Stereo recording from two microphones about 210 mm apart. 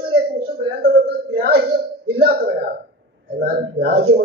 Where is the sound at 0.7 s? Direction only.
50° right (ahead or behind).